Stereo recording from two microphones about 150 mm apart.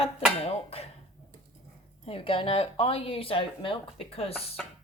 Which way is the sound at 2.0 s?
35° left (ahead or behind).